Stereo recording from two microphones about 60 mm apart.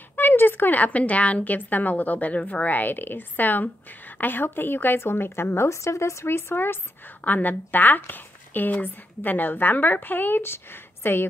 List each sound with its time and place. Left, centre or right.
0.1 s a woman's voice: left